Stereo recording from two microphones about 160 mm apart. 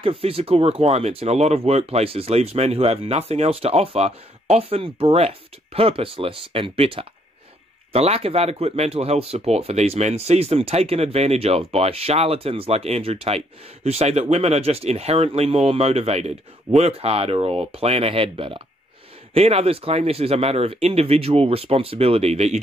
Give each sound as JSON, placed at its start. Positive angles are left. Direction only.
{"t": 0.0, "sound": "speech", "side_deg": -35}